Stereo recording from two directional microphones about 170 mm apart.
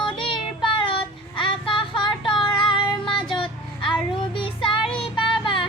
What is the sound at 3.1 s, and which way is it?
Music, 30° left (ahead or behind).